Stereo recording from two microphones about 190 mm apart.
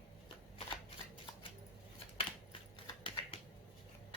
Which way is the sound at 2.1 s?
30° left (ahead or behind).